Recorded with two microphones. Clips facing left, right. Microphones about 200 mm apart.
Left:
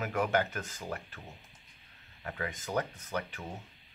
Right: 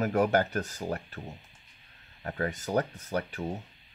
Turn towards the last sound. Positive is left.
turn(degrees=-40)  # may be behind; listen again after turning